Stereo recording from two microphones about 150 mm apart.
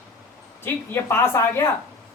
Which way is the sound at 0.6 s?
15° left (ahead or behind).